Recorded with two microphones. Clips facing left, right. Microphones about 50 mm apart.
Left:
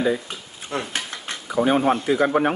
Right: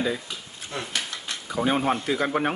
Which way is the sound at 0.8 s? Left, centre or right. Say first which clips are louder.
Left 1 dB; left.